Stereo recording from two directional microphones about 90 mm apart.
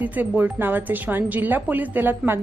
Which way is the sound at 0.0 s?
20° right (ahead or behind).